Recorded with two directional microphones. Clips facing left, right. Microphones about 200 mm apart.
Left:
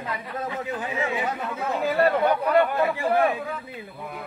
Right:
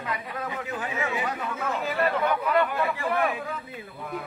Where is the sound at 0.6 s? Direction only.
25° left (ahead or behind).